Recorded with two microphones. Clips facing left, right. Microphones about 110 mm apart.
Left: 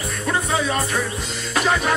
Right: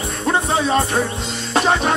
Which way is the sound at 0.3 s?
30° right (ahead or behind).